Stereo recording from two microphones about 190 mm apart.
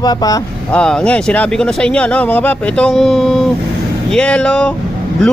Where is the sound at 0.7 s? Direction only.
5° left (ahead or behind).